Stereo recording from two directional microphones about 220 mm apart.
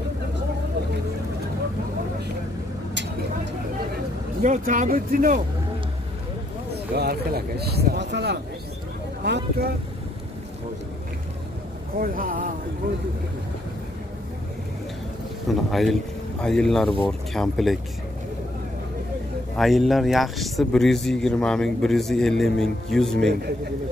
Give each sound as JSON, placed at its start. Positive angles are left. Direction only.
{"t": 4.4, "sound": "speech", "side_deg": -35}
{"t": 6.7, "sound": "speech", "side_deg": -45}
{"t": 12.0, "sound": "speech", "side_deg": -40}
{"t": 15.4, "sound": "speech", "side_deg": 0}
{"t": 19.5, "sound": "speech", "side_deg": 0}